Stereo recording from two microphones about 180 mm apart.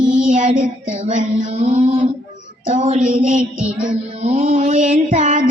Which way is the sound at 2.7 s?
45° right (ahead or behind).